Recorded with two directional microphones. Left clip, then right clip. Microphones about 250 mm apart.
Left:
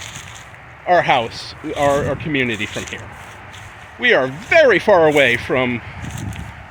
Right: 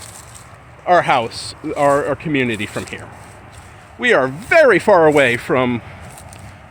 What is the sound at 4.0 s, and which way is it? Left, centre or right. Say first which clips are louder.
Speech: even; centre.